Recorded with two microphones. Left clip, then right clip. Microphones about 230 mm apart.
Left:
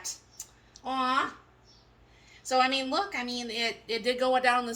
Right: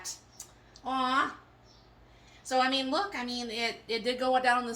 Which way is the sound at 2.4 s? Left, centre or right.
Left.